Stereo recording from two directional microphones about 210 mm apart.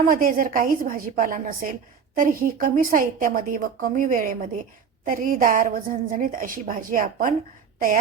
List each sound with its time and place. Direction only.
0.1 s a woman's voice: 40° right (ahead or behind)